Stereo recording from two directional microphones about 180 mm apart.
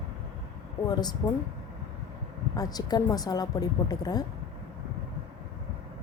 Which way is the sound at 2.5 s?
20° left (ahead or behind).